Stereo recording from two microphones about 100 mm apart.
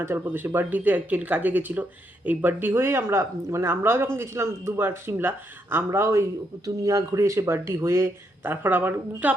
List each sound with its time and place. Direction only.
0.0 s speech: 25° right (ahead or behind)